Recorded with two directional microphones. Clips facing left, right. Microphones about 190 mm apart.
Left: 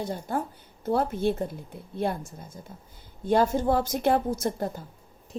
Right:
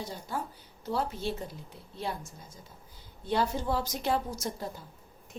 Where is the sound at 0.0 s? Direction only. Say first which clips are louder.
Left 7 dB; 55° left (ahead or behind).